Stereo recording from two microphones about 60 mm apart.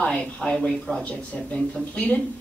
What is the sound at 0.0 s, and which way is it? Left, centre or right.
Speech, centre.